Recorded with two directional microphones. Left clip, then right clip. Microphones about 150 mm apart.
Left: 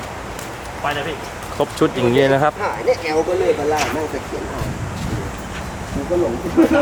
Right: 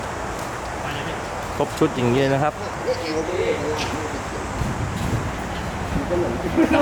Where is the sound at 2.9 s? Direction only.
20° left (ahead or behind).